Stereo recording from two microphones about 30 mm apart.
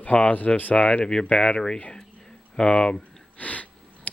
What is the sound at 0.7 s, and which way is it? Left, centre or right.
Speech, left.